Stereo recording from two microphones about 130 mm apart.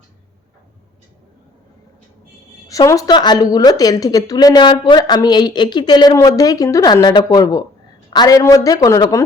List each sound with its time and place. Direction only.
2.6 s speech: 25° left (ahead or behind)